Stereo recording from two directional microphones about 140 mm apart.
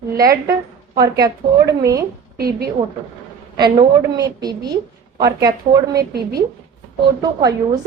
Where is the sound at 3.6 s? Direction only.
30° right (ahead or behind).